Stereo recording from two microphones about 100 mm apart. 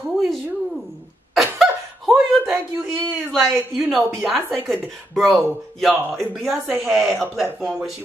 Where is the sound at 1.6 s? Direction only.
Centre (ahead or behind).